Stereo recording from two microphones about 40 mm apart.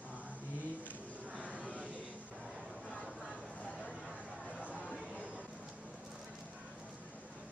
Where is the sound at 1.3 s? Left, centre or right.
Right.